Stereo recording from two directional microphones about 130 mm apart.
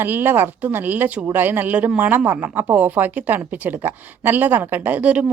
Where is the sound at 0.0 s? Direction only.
15° right (ahead or behind).